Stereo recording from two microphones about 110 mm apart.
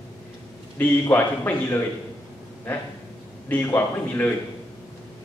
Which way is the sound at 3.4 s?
20° left (ahead or behind).